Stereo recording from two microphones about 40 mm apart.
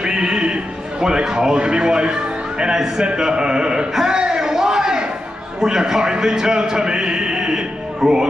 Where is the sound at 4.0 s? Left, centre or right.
Centre.